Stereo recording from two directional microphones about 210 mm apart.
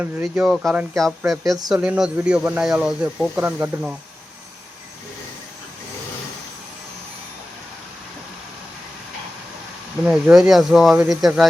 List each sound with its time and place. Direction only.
0.0 s speech: 10° right (ahead or behind)
0.4 s speech: centre (ahead or behind)
1.5 s speech: 20° right (ahead or behind)
1.7 s speech: 5° right (ahead or behind)
10.0 s speech: 5° right (ahead or behind)